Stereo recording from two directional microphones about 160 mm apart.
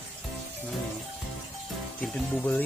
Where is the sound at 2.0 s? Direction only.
10° left (ahead or behind).